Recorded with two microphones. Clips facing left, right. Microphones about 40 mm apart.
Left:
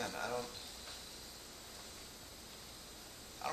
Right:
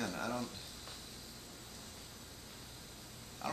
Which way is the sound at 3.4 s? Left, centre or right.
Centre.